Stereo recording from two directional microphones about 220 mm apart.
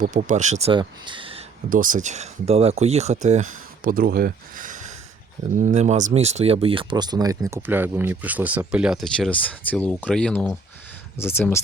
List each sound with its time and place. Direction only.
0.0 s speech: 35° right (ahead or behind)
1.7 s speech: 35° right (ahead or behind); by 11.6 s 10° left (ahead or behind)